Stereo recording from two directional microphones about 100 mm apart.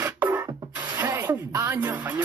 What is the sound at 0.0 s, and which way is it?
Rub, 20° right (ahead or behind).